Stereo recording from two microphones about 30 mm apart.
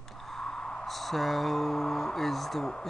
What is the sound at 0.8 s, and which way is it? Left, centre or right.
Speech, centre.